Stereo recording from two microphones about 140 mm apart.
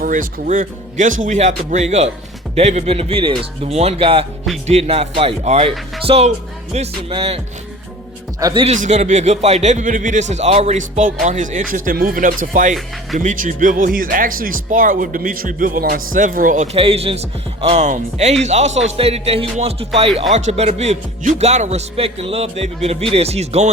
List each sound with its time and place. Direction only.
0.0 s speech: 80° right; by 7.4 s 40° right (ahead or behind)
8.4 s speech: 25° right (ahead or behind)
8.6 s speech: 55° right (ahead or behind)
10.8 s speech: 65° right (ahead or behind)
16.7 s speech: 45° right (ahead or behind)